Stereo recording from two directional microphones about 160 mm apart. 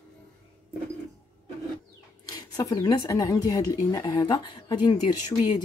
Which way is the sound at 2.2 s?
25° left (ahead or behind).